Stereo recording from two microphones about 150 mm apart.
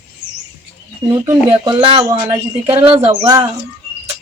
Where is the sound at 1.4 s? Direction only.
40° right (ahead or behind).